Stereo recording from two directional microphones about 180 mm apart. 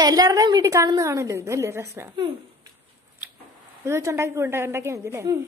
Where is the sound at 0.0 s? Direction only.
20° right (ahead or behind).